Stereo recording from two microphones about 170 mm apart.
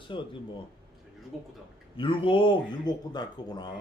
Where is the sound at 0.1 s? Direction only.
30° left (ahead or behind).